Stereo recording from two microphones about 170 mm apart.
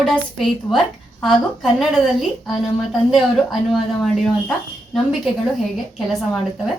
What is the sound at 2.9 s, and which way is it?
A woman's voice, centre (ahead or behind).